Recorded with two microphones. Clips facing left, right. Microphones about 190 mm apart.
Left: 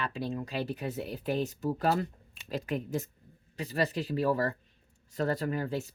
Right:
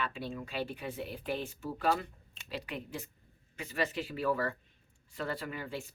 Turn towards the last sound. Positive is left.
turn(degrees=40)  # may be behind; listen again after turning